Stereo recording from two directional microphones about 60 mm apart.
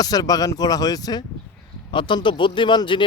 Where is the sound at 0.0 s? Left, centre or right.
Left.